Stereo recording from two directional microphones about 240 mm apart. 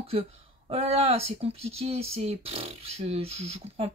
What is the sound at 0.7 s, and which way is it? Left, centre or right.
Speech, right.